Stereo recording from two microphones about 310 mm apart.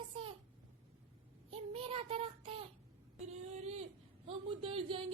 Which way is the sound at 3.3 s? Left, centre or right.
Right.